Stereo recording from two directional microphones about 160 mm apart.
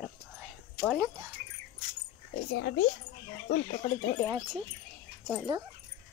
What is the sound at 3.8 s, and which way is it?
Speech, 25° left (ahead or behind).